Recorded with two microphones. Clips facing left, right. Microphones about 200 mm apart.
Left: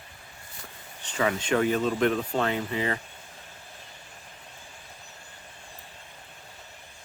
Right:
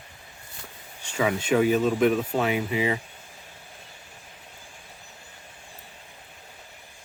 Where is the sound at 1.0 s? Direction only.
10° right (ahead or behind).